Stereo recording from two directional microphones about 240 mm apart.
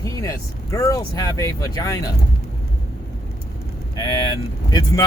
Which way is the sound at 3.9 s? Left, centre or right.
Centre.